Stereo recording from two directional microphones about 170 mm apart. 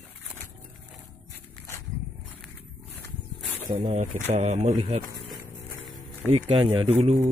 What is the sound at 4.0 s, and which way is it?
Speech, 45° right (ahead or behind).